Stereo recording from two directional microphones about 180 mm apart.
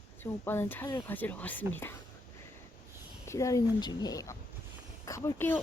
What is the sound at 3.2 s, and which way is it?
Speech, 15° left (ahead or behind).